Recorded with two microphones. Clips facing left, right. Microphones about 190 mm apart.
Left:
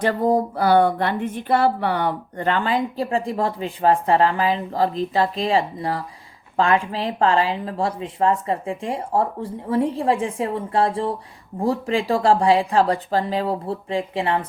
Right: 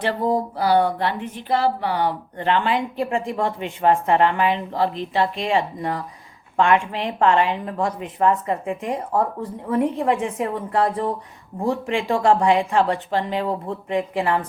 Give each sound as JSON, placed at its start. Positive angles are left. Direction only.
{"t": 0.0, "sound": "speech", "side_deg": 45}